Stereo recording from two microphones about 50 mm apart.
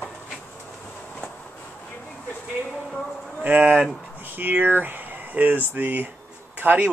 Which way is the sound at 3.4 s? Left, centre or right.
Right.